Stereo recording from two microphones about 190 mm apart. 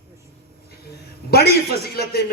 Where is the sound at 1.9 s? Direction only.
55° left (ahead or behind).